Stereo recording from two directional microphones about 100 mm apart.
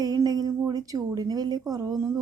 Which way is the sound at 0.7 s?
40° right (ahead or behind).